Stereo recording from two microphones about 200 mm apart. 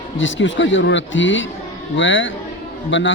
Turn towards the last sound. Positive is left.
turn(degrees=65)  # may be behind; listen again after turning